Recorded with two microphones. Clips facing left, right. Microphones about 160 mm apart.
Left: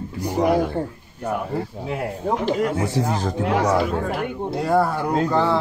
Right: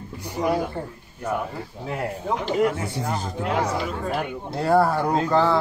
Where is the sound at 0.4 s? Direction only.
65° left (ahead or behind).